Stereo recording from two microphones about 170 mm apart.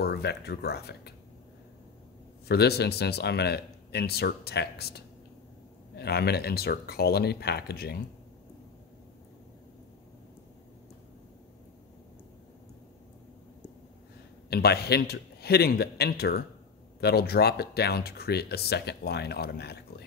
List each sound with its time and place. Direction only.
0.0 s speech: 75° left (ahead or behind)
2.4 s speech: 70° left (ahead or behind)
14.5 s speech: 70° left (ahead or behind)